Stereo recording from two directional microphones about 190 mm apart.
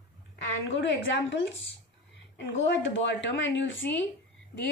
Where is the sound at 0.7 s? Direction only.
70° left (ahead or behind).